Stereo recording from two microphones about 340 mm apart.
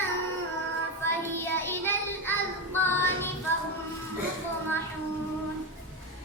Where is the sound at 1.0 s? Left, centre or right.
Centre.